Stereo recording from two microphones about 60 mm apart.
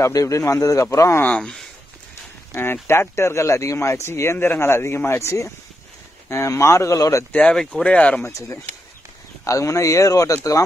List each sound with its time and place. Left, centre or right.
0.0 s a man's voice: left
0.8 s speech: left
1.4 s speech: centre
2.5 s speech: left
7.3 s speech: centre
8.3 s speech: left